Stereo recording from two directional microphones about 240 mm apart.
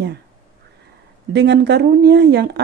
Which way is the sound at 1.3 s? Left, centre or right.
Right.